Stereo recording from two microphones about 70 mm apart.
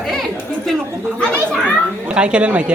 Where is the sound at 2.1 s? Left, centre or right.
Centre.